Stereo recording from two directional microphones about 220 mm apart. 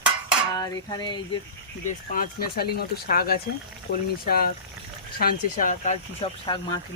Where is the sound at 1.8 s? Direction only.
40° left (ahead or behind).